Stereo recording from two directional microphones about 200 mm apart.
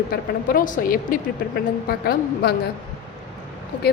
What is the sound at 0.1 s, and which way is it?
A woman's voice, 45° left (ahead or behind).